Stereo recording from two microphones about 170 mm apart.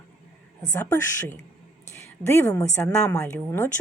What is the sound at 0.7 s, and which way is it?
A woman's voice, 15° left (ahead or behind).